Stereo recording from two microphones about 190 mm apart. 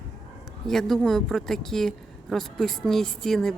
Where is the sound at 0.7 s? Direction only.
Centre (ahead or behind).